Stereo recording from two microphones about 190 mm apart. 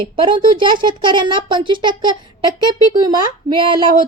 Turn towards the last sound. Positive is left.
turn(degrees=-25)  # may be behind; listen again after turning